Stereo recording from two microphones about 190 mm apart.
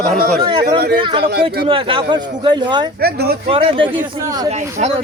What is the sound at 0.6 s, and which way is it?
Speech, 55° right (ahead or behind).